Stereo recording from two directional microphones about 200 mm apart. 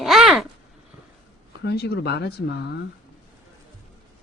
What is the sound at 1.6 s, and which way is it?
Speech, 55° left (ahead or behind).